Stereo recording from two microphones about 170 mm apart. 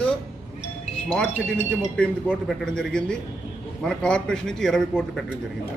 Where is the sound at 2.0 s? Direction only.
5° left (ahead or behind).